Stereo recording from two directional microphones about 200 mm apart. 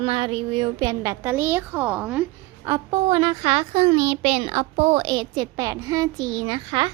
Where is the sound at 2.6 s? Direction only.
20° right (ahead or behind).